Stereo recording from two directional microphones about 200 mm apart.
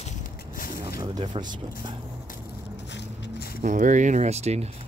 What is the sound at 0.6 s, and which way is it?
Vehicle, 50° left (ahead or behind).